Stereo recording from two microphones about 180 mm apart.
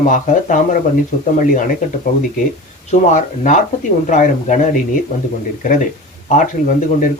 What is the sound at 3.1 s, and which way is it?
A man's voice, 45° left (ahead or behind).